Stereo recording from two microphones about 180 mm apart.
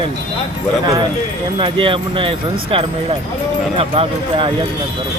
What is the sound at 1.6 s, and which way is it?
Speech, 30° right (ahead or behind).